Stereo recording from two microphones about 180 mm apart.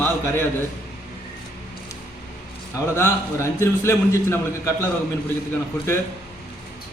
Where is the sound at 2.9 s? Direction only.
15° left (ahead or behind).